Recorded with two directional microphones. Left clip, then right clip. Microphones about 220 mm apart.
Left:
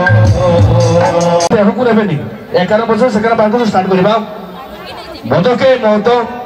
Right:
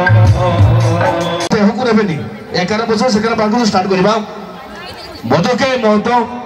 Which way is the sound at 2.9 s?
10° right (ahead or behind).